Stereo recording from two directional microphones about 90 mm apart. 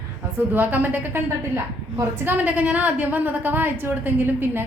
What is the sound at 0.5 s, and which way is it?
Speech, 20° right (ahead or behind).